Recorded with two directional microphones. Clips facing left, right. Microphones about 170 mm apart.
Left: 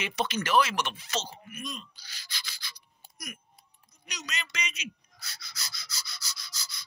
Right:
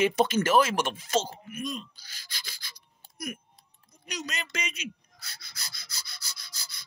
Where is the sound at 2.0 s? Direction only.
50° right (ahead or behind).